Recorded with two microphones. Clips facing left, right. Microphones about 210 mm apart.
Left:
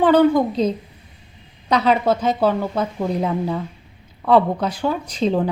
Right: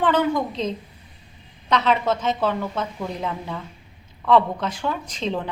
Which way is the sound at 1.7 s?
35° left (ahead or behind).